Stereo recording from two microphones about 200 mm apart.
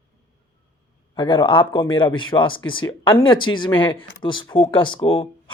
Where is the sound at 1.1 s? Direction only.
25° left (ahead or behind).